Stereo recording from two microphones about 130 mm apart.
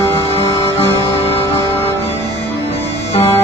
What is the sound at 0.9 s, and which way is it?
Music, 15° left (ahead or behind).